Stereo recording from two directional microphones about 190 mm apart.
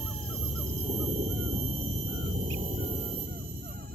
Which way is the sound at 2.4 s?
35° right (ahead or behind).